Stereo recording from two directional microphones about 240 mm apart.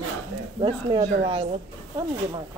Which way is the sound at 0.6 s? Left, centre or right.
Right.